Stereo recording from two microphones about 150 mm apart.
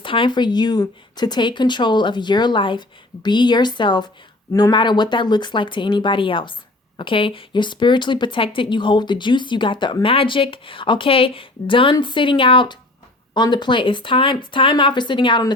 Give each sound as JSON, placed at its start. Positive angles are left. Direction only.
{"t": 0.0, "sound": "speech", "side_deg": 35}